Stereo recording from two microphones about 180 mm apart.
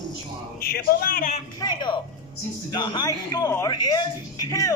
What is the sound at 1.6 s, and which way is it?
A man's voice, 25° left (ahead or behind).